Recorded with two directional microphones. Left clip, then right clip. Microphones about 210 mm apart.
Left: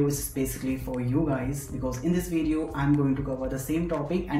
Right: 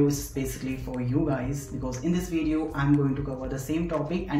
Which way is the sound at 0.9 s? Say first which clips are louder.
Right 1 dB; 5° right (ahead or behind).